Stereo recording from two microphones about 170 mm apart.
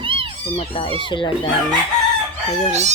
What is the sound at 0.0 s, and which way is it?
Cat, 30° right (ahead or behind).